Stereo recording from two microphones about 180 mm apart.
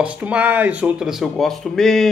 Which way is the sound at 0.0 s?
5° right (ahead or behind).